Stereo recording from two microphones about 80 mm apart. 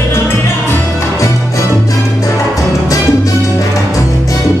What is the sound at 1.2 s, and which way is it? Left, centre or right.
Music, left.